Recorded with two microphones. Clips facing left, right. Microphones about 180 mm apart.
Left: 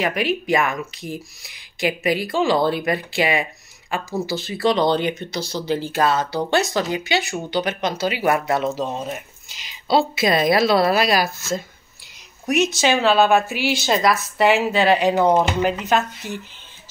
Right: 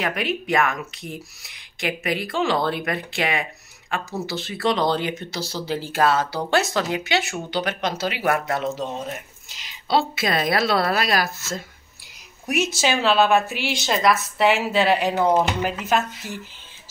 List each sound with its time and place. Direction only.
0.0 s speech: centre (ahead or behind)
8.2 s speech: 25° left (ahead or behind)
9.8 s speech: centre (ahead or behind)
12.4 s speech: 5° right (ahead or behind)